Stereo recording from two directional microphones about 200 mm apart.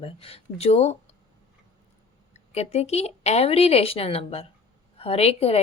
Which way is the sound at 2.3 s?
30° left (ahead or behind).